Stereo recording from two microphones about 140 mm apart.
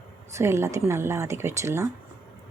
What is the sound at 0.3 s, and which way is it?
A woman's voice, 20° right (ahead or behind).